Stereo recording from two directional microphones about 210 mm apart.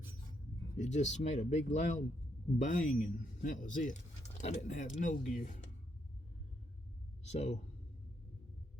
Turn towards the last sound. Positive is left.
turn(degrees=30)  # may be behind; listen again after turning